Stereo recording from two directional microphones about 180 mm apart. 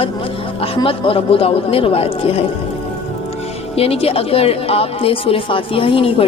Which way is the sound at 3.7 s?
35° left (ahead or behind).